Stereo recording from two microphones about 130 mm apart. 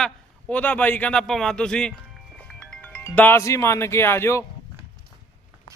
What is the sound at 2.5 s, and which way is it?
Music, 10° left (ahead or behind).